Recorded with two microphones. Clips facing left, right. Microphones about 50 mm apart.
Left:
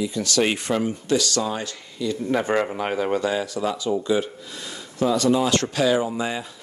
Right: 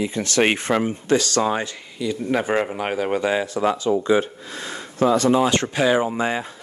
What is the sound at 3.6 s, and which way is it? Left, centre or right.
Speech, right.